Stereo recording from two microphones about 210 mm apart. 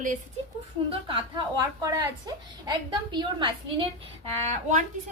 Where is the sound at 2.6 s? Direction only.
20° right (ahead or behind).